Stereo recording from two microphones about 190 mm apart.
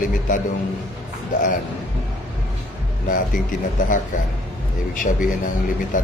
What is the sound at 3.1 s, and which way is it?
Speech, 45° left (ahead or behind).